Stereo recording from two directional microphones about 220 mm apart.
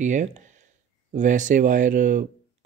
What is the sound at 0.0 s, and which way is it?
Speech, 35° right (ahead or behind).